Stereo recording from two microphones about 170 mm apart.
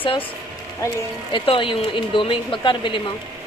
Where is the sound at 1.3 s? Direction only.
30° left (ahead or behind).